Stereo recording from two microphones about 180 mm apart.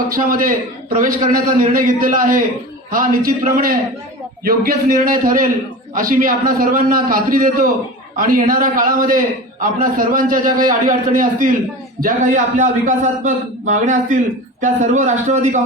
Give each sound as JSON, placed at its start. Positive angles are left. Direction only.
{"t": 0.1, "sound": "a man's voice", "side_deg": -50}